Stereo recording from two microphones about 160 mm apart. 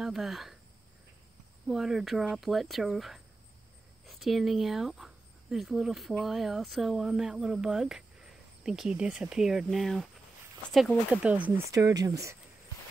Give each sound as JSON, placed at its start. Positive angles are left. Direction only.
{"t": 0.0, "sound": "speech", "side_deg": 0}
{"t": 1.7, "sound": "speech", "side_deg": 0}
{"t": 11.7, "sound": "speech", "side_deg": -20}